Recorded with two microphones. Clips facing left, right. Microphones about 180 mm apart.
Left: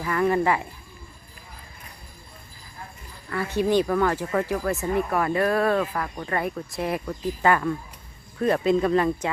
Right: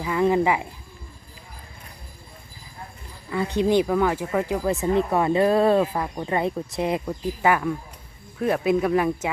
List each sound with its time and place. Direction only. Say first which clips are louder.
0.0 s speech: right 2 dB; 15° right (ahead or behind)
3.2 s speech: right 2 dB; 20° right (ahead or behind)